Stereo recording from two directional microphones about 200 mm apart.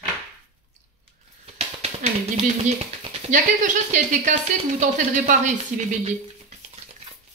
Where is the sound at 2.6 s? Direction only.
35° right (ahead or behind).